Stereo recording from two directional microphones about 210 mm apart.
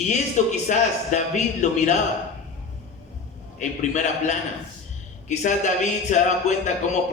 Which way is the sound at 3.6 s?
35° left (ahead or behind).